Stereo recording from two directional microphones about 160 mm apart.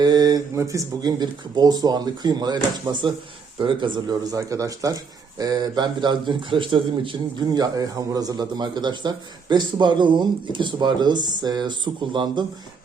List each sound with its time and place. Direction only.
0.0 s a man's voice: 25° right (ahead or behind)